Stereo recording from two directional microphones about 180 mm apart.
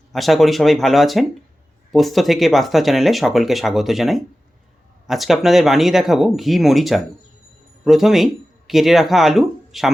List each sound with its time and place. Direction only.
0.1 s speech: centre (ahead or behind)